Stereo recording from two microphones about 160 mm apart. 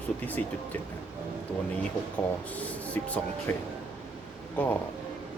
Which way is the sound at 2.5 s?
10° left (ahead or behind).